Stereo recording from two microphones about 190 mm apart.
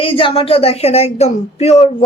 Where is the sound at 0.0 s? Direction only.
25° left (ahead or behind).